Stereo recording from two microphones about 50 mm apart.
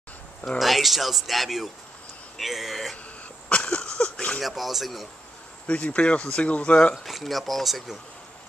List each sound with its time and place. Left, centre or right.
0.6 s speech: centre
3.4 s a sound: left
4.4 s speech: centre
5.7 s speech: left
7.0 s speech: centre